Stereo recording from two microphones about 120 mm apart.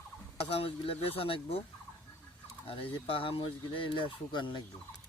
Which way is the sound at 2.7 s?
50° left (ahead or behind).